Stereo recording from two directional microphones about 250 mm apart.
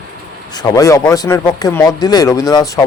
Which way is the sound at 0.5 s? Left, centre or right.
Centre.